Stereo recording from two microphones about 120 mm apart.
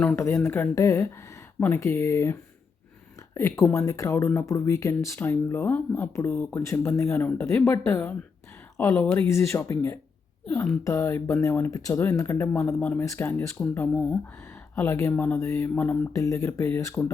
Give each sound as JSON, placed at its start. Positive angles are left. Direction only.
{"t": 0.2, "sound": "speech", "side_deg": 20}
{"t": 14.4, "sound": "a sound", "side_deg": 20}
{"t": 15.1, "sound": "speech", "side_deg": 15}
{"t": 16.1, "sound": "speech", "side_deg": 25}